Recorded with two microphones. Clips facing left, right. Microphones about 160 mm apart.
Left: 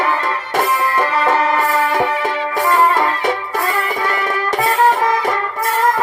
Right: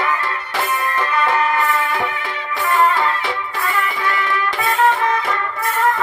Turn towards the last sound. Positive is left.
turn(degrees=40)  # may be behind; listen again after turning